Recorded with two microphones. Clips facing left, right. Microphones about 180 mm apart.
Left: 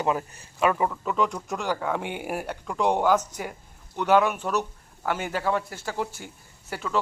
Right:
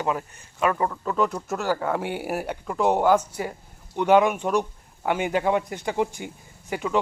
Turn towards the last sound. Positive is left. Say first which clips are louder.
# right 5 dB
turn(degrees=-15)  # may be behind; listen again after turning